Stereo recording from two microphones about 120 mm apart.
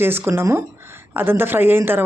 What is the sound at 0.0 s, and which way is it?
Speech, 20° right (ahead or behind).